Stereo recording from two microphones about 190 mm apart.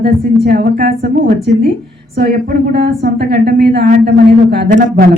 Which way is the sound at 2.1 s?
55° right (ahead or behind).